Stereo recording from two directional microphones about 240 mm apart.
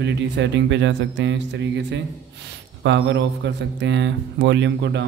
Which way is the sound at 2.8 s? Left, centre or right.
Right.